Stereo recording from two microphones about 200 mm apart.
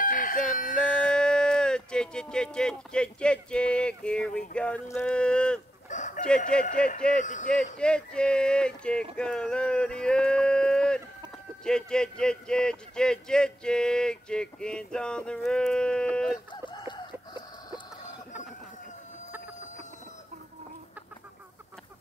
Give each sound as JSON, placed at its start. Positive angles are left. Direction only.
{"t": 0.0, "sound": "chicken", "side_deg": 45}
{"t": 0.7, "sound": "speech", "side_deg": 5}
{"t": 5.9, "sound": "chicken", "side_deg": 40}
{"t": 6.5, "sound": "a man's voice", "side_deg": 5}
{"t": 7.2, "sound": "speech", "side_deg": 40}
{"t": 7.8, "sound": "a man's voice", "side_deg": 5}
{"t": 16.6, "sound": "a sound", "side_deg": 25}